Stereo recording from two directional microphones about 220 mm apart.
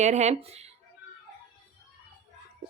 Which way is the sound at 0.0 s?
30° right (ahead or behind).